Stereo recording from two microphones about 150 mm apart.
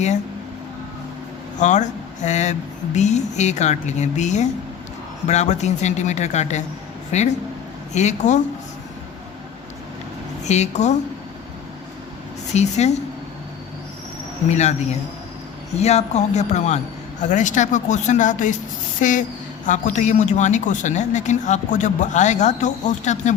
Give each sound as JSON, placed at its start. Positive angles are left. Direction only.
{"t": 1.5, "sound": "a man's voice", "side_deg": 55}
{"t": 10.4, "sound": "a man's voice", "side_deg": 50}
{"t": 12.5, "sound": "a man's voice", "side_deg": 50}
{"t": 14.5, "sound": "a man's voice", "side_deg": 50}
{"t": 18.9, "sound": "a sound", "side_deg": 60}
{"t": 19.6, "sound": "a man's voice", "side_deg": 55}